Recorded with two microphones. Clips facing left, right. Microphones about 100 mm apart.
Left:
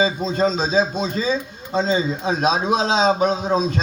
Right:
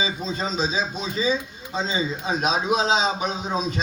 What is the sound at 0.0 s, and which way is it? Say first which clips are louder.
A man's voice: left 8 dB; 40° left (ahead or behind).